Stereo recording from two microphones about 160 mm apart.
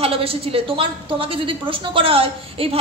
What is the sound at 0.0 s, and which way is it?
A woman's voice, 35° right (ahead or behind).